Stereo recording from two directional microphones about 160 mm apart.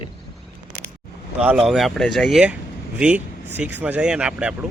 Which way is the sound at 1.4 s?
5° right (ahead or behind).